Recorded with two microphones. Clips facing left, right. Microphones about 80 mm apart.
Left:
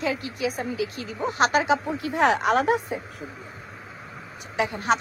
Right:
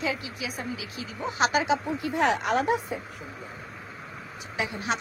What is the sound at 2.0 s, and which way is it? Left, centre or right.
Speech, left.